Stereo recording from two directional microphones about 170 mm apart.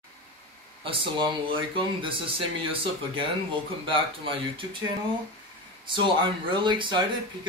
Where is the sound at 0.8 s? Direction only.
30° right (ahead or behind).